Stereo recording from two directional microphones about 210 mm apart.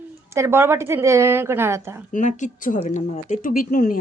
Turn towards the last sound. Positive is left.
turn(degrees=40)  # may be behind; listen again after turning